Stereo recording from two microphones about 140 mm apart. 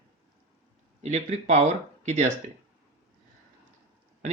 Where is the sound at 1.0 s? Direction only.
55° right (ahead or behind).